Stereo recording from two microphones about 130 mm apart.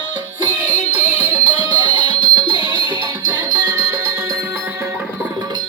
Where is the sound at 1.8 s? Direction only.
35° right (ahead or behind).